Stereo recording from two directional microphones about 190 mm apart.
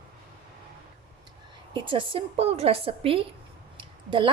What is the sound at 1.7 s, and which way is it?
Speech, 25° right (ahead or behind).